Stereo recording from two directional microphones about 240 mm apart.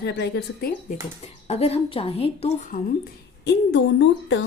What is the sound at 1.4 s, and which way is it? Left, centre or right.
Speech, left.